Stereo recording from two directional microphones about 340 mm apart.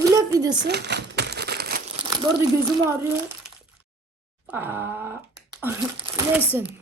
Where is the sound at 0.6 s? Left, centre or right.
Right.